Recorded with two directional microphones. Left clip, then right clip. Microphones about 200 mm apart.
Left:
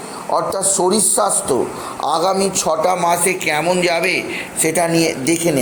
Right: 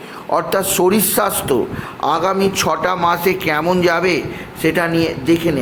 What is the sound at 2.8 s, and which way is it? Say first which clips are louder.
Speech: left 1 dB; 15° right (ahead or behind).